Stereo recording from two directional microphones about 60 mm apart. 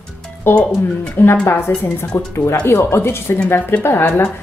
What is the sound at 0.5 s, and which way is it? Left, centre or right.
A woman's voice, left.